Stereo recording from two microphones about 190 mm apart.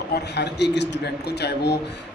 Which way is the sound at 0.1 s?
60° left (ahead or behind).